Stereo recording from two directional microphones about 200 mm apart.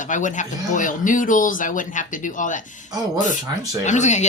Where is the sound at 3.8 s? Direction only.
35° left (ahead or behind).